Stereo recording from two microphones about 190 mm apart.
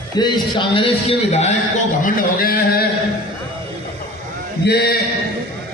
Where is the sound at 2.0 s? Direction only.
50° left (ahead or behind).